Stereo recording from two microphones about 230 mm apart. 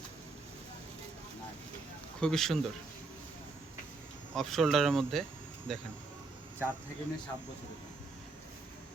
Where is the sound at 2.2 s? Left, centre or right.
Centre.